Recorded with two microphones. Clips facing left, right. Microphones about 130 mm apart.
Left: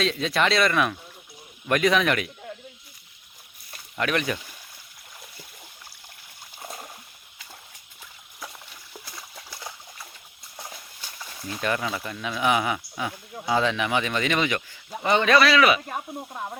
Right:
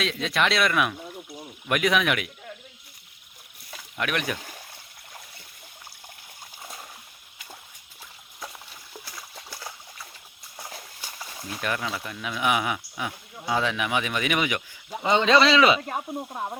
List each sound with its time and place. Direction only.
0.0 s speech: centre (ahead or behind)
3.9 s speech: centre (ahead or behind)
8.9 s a sound: centre (ahead or behind)
10.6 s a sound: 10° right (ahead or behind)
11.4 s speech: centre (ahead or behind); by 15.8 s 25° right (ahead or behind)
15.9 s speech: 15° right (ahead or behind)